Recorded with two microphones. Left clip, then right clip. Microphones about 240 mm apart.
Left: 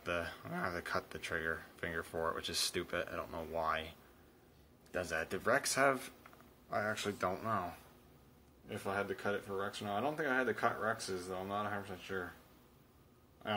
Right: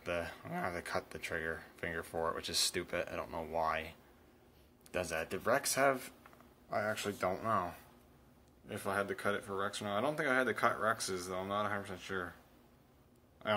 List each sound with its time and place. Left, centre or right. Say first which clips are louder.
0.0 s speech: even; centre
4.9 s speech: right 1 dB; centre